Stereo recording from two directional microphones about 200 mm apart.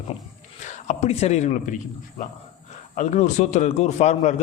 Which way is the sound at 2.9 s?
40° left (ahead or behind).